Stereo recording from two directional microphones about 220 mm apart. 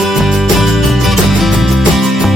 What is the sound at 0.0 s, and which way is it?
Music, centre (ahead or behind).